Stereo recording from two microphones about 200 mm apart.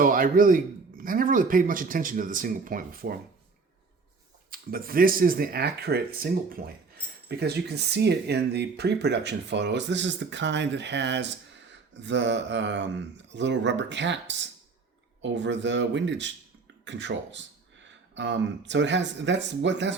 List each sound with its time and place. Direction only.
0.0 s speech: 45° right (ahead or behind)
4.5 s speech: 45° right (ahead or behind); by 20.0 s 65° right (ahead or behind)